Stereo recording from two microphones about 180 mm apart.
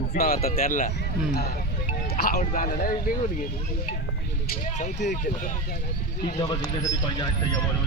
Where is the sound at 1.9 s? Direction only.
55° left (ahead or behind).